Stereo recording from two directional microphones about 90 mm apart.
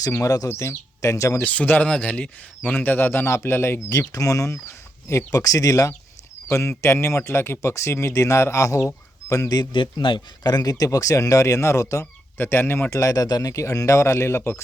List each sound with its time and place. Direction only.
0.1 s a man's voice: 40° left (ahead or behind)
1.5 s speech: 20° left (ahead or behind)
3.8 s a man's voice: 40° left (ahead or behind)
9.7 s a man's voice: 65° left (ahead or behind); by 14.6 s 30° left (ahead or behind)